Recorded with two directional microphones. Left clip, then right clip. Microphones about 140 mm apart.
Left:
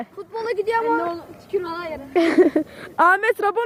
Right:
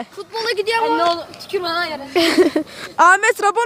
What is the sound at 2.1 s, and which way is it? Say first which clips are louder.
A woman's voice: right 2 dB; centre (ahead or behind).